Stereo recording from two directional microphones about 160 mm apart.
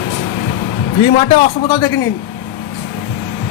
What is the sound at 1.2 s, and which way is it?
Speech, 35° left (ahead or behind).